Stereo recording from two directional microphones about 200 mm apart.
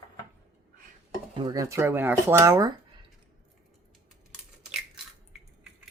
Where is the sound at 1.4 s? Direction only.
20° right (ahead or behind).